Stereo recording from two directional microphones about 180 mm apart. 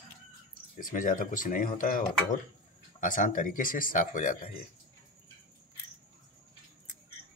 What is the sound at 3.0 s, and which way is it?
Speech, 45° left (ahead or behind).